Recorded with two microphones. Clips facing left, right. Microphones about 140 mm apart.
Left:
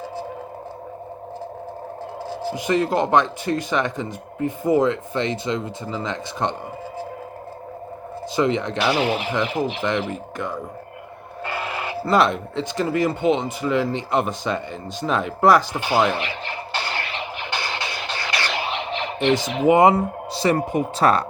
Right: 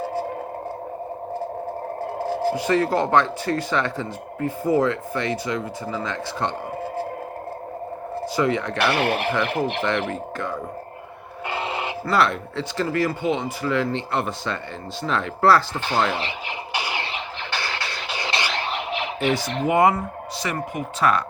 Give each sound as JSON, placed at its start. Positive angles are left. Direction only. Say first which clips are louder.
{"t": 2.1, "sound": "radio", "louder": "right 5 dB", "side_deg": -45}
{"t": 2.6, "sound": "speech", "louder": "left 3 dB", "side_deg": 20}
{"t": 8.4, "sound": "speech", "louder": "left 2 dB", "side_deg": 20}
{"t": 8.8, "sound": "speech", "louder": "even", "side_deg": -60}
{"t": 10.1, "sound": "speech", "louder": "even", "side_deg": 15}
{"t": 11.4, "sound": "a sound", "louder": "right 1 dB", "side_deg": -25}
{"t": 12.0, "sound": "speech", "louder": "left 3 dB", "side_deg": 20}
{"t": 16.7, "sound": "a sound", "louder": "even", "side_deg": -15}
{"t": 17.5, "sound": "vehicle", "louder": "even", "side_deg": 20}
{"t": 18.5, "sound": "a sound", "louder": "left 1 dB", "side_deg": 0}
{"t": 19.6, "sound": "speech", "louder": "left 4 dB", "side_deg": 20}